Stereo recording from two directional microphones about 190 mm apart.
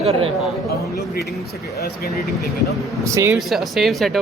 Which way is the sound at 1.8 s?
55° left (ahead or behind).